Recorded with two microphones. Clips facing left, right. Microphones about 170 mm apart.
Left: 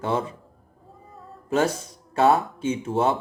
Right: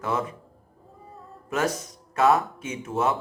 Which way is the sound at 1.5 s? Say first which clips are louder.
Left 4 dB; 30° left (ahead or behind).